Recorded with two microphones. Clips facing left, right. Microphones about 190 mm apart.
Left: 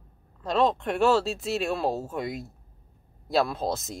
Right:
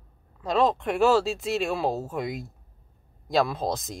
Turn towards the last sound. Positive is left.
turn(degrees=0)  # may be behind; listen again after turning